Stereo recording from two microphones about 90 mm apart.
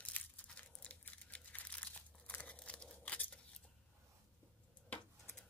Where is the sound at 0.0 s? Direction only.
15° left (ahead or behind).